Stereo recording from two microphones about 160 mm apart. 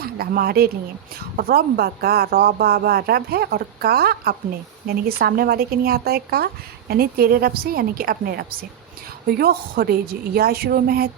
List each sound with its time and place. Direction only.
0.0 s speech: 70° right (ahead or behind)